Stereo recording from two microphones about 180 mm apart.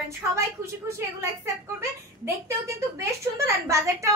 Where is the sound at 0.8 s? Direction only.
15° right (ahead or behind).